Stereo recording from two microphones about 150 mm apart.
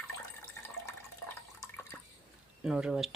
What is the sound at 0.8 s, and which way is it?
Water, 20° left (ahead or behind).